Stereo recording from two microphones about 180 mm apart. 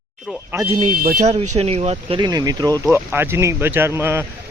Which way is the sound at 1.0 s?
45° right (ahead or behind).